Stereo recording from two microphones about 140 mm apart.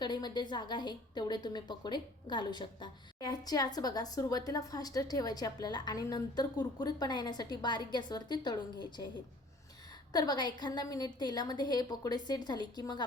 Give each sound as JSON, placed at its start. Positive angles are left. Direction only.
{"t": 0.0, "sound": "a woman's voice", "side_deg": 30}
{"t": 10.1, "sound": "a woman's voice", "side_deg": 30}